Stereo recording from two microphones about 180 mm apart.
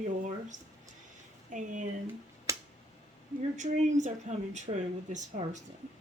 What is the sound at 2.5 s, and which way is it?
Finger snapping, 15° right (ahead or behind).